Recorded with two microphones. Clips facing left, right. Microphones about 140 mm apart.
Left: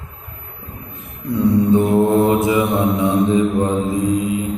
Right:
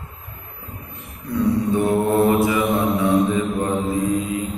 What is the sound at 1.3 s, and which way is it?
Mantra, 20° left (ahead or behind).